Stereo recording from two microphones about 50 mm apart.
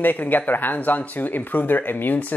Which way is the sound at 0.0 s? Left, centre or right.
Left.